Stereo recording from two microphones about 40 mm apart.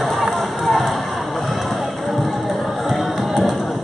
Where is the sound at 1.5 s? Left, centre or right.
Centre.